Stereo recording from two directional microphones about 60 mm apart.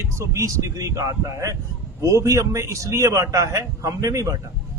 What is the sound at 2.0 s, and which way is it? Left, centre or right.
Speech, right.